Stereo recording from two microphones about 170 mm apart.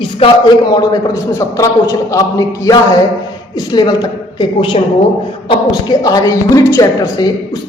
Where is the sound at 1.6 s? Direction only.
20° left (ahead or behind).